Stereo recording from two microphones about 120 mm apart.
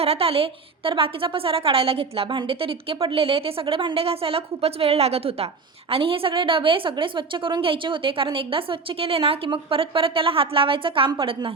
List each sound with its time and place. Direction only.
0.0 s a woman's voice: 55° right (ahead or behind)